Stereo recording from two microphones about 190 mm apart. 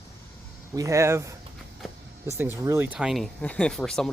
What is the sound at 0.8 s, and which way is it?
Speech, 15° right (ahead or behind).